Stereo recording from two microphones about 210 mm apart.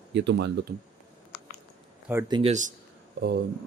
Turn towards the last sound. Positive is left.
turn(degrees=-50)  # may be behind; listen again after turning